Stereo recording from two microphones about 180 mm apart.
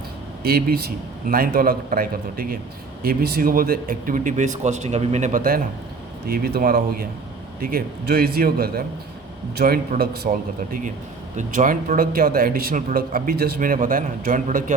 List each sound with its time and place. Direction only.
0.4 s speech: 60° right (ahead or behind)
11.3 s speech: 45° right (ahead or behind)